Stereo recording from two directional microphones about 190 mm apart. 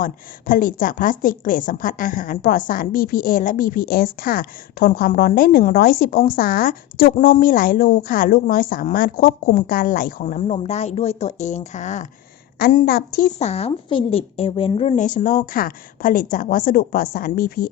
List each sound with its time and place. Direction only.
0.0 s a woman's voice: 45° left (ahead or behind)
12.5 s a woman's voice: 55° left (ahead or behind)
13.4 s a woman's voice: 35° left (ahead or behind); by 17.7 s 50° left (ahead or behind)